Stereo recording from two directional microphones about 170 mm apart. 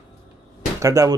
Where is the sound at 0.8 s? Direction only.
20° right (ahead or behind).